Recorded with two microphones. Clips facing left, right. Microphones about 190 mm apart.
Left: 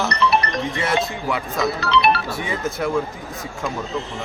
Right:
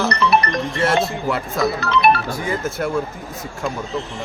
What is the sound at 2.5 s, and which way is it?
Speech, centre (ahead or behind).